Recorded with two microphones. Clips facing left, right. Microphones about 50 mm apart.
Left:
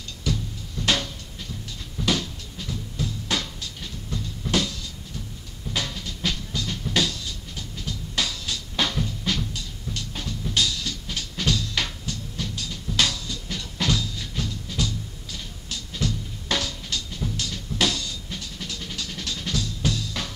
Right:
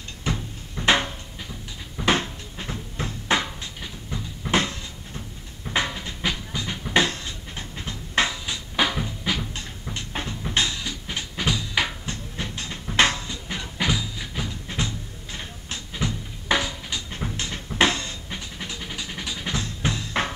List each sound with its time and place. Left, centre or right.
0.2 s music: right
9.9 s music: right
12.1 s music: right
14.7 s music: right
17.1 s music: right
17.7 s vehicle: right
19.5 s music: right